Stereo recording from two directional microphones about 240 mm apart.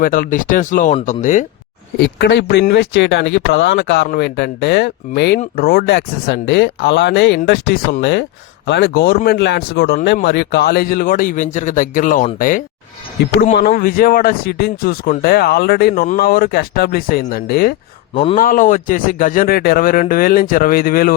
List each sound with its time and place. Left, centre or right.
0.0 s speech: left
2.0 s speech: left
18.1 s speech: left
18.3 s speech: left